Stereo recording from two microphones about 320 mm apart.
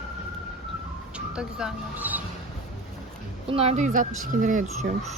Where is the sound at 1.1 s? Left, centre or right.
Centre.